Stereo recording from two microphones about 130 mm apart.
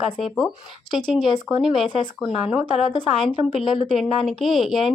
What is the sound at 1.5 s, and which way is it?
Speech, centre (ahead or behind).